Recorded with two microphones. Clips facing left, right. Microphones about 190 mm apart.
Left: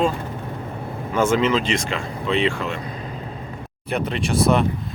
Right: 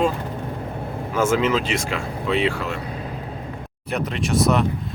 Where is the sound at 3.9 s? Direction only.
Centre (ahead or behind).